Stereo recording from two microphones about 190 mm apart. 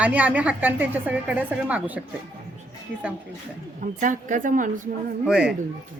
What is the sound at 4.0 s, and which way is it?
Speech, 40° right (ahead or behind).